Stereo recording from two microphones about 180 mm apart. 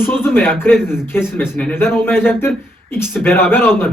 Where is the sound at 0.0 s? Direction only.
10° left (ahead or behind).